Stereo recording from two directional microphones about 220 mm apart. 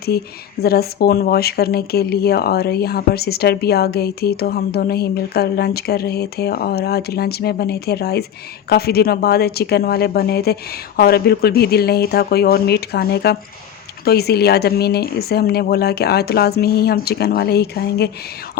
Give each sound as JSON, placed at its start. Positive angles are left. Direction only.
{"t": 0.1, "sound": "speech", "side_deg": 45}